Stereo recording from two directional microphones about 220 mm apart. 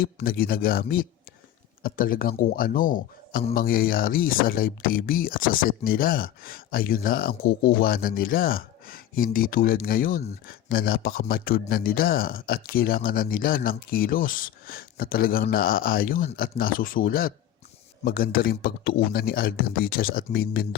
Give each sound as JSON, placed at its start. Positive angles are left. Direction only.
{"t": 0.0, "sound": "speech", "side_deg": 40}